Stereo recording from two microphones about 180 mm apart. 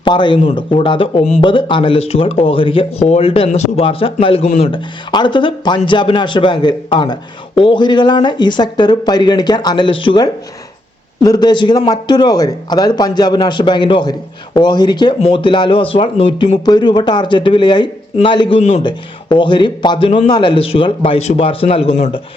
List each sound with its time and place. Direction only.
0.0 s a man's voice: 25° left (ahead or behind)
4.4 s speech: 45° left (ahead or behind)
4.7 s a man's voice: 25° left (ahead or behind)